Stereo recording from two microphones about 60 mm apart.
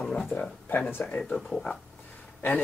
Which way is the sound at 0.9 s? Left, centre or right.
Left.